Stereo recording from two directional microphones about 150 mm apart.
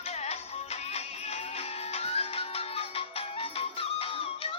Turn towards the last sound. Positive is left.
turn(degrees=40)  # may be behind; listen again after turning